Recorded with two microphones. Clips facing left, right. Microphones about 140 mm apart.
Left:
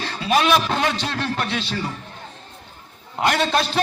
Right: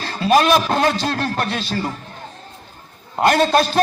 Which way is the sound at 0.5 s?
35° right (ahead or behind).